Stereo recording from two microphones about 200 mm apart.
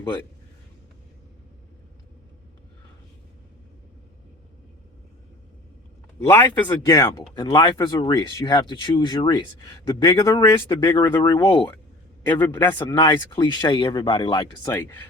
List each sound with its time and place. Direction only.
6.1 s speech: 10° left (ahead or behind)
12.9 s speech: 20° left (ahead or behind)